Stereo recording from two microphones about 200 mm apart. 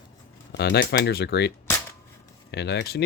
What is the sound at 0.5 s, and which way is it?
Speech, 55° left (ahead or behind).